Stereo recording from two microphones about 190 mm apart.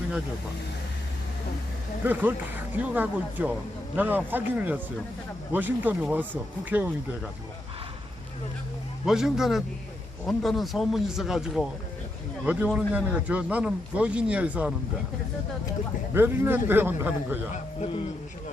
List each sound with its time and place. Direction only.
2.0 s a man's voice: 10° right (ahead or behind)
9.0 s a man's voice: centre (ahead or behind)
16.1 s a man's voice: 10° right (ahead or behind)
17.5 s speech: 30° left (ahead or behind)